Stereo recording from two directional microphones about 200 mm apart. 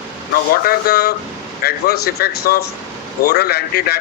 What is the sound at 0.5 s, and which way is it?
Speech, 50° left (ahead or behind).